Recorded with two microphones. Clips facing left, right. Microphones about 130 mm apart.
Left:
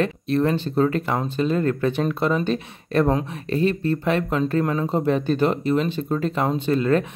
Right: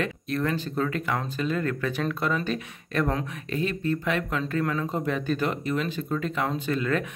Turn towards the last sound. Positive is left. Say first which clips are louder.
# left 7 dB
turn(degrees=30)  # may be behind; listen again after turning